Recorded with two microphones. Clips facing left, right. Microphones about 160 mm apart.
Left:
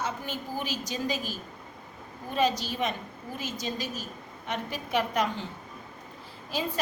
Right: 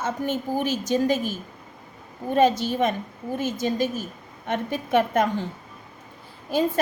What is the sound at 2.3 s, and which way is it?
A woman's voice, 50° right (ahead or behind).